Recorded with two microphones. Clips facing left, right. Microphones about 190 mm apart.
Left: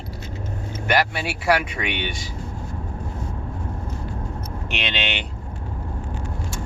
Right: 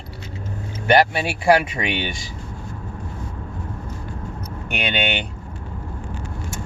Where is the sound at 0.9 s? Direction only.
25° right (ahead or behind).